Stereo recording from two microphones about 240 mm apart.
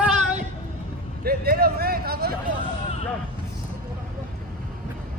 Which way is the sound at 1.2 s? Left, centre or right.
Right.